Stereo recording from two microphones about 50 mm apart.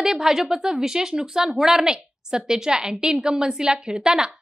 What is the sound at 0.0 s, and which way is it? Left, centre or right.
Speech, centre.